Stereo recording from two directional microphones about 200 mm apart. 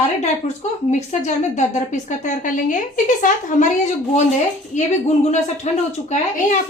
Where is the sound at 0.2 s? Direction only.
35° left (ahead or behind).